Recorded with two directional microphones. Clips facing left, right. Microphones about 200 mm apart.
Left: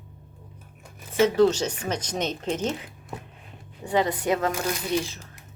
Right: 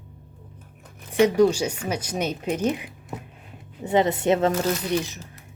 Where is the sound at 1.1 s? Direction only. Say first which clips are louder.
Right 1 dB; 15° right (ahead or behind).